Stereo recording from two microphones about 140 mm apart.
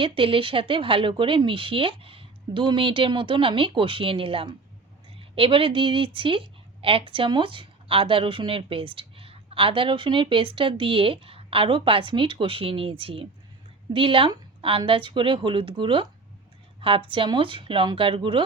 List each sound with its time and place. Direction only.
0.0 s speech: 40° right (ahead or behind)